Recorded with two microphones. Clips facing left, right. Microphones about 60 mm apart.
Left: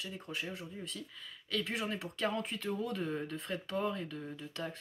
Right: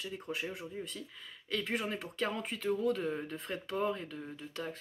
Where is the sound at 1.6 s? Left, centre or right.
Centre.